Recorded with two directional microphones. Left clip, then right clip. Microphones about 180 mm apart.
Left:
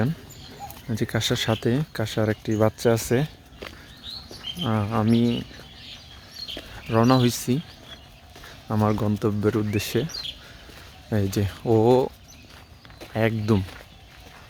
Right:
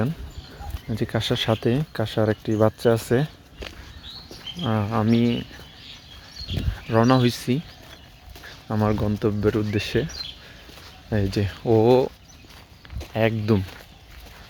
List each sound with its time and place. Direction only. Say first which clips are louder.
0.9 s speech: even; 5° left (ahead or behind)
3.6 s a sound: right 1 dB; 40° right (ahead or behind)
4.6 s speech: right 1 dB; centre (ahead or behind)
6.8 s speech: right 1 dB; centre (ahead or behind)
8.6 s speech: even; centre (ahead or behind)
11.1 s speech: right 1 dB; 5° left (ahead or behind)
13.1 s speech: right 2 dB; centre (ahead or behind)